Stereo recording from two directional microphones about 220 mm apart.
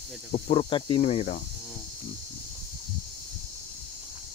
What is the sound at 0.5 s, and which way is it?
Speech, 25° left (ahead or behind).